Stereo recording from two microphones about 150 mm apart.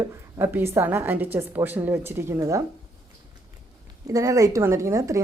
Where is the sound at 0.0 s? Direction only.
15° right (ahead or behind).